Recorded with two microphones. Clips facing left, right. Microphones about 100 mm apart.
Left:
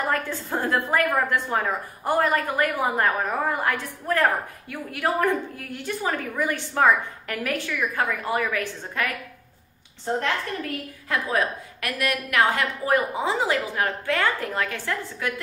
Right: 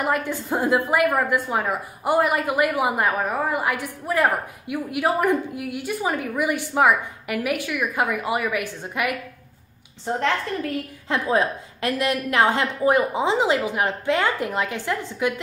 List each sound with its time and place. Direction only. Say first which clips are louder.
0.0 s a woman's voice: right 2 dB; 15° right (ahead or behind)
10.7 s a woman's voice: right 3 dB; 25° right (ahead or behind)